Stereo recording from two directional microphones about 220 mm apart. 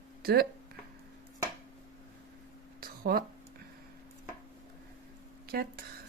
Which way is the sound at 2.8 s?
45° right (ahead or behind).